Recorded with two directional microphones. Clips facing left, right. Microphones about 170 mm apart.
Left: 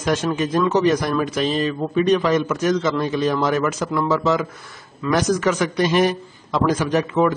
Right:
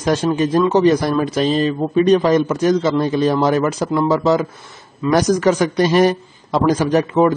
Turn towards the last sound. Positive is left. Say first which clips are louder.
# right 4 dB
turn(degrees=-35)  # may be behind; listen again after turning